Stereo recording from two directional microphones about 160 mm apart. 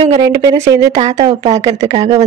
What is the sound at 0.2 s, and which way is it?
Speech, 20° right (ahead or behind).